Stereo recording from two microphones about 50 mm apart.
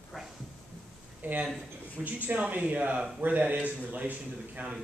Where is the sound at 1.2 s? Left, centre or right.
Right.